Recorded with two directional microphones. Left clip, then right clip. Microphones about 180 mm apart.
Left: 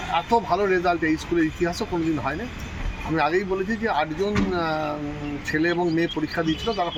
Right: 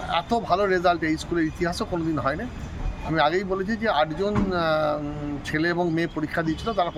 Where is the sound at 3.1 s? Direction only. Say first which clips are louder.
Even; 30° right (ahead or behind).